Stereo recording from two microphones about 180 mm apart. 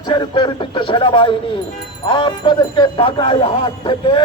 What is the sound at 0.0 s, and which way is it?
Speech, 25° left (ahead or behind).